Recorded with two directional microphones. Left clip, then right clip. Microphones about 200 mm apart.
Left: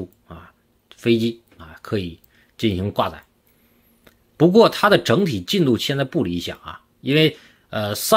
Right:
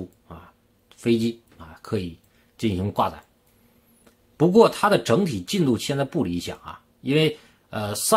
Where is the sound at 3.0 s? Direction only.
10° left (ahead or behind).